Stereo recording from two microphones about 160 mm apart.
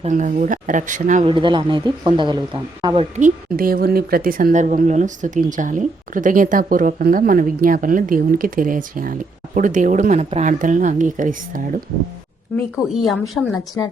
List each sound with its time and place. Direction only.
0.0 s speech: 50° right (ahead or behind)
1.2 s speech: 30° right (ahead or behind)
3.2 s a woman's voice: 55° right (ahead or behind)
12.7 s a woman's voice: centre (ahead or behind)